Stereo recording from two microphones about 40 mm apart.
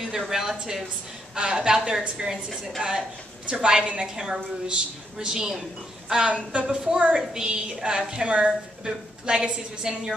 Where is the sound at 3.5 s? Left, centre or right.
Right.